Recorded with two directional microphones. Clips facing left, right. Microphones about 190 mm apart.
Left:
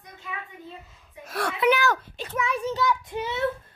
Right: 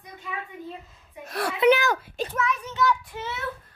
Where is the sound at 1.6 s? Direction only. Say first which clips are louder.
Right 3 dB; 25° right (ahead or behind).